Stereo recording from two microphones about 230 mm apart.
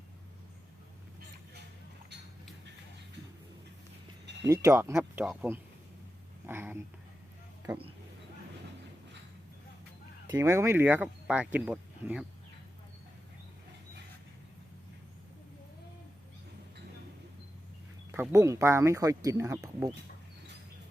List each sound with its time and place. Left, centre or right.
4.3 s a sound: right
4.6 s speech: centre
7.7 s speech: right
10.3 s speech: centre
18.1 s speech: centre